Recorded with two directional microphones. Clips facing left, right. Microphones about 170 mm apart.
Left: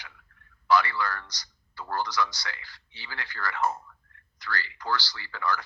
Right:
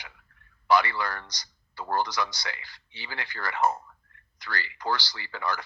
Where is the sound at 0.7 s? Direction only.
15° right (ahead or behind).